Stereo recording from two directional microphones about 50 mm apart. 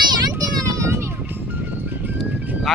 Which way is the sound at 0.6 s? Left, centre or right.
Right.